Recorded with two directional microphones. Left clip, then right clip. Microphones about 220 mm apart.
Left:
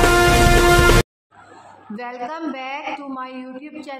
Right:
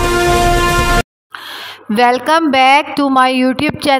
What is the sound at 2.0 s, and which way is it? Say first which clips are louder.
A woman's voice: right 18 dB; 45° right (ahead or behind).